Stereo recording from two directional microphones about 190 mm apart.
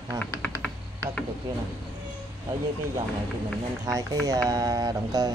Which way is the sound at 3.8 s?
15° right (ahead or behind).